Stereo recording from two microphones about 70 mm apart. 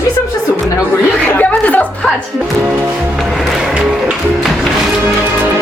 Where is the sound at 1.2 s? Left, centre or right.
Left.